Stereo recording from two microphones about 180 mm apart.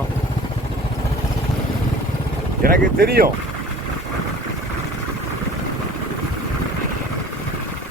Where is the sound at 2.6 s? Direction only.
55° right (ahead or behind).